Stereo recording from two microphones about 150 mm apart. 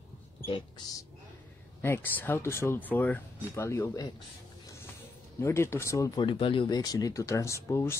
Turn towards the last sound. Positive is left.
turn(degrees=20)  # may be behind; listen again after turning